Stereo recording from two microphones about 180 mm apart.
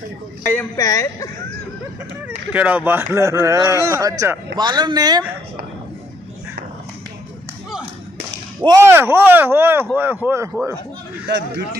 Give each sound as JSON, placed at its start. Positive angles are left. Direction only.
{"t": 0.5, "sound": "speech", "side_deg": 15}
{"t": 2.2, "sound": "speech", "side_deg": -10}
{"t": 8.6, "sound": "speech", "side_deg": -15}
{"t": 11.2, "sound": "a man's voice", "side_deg": -70}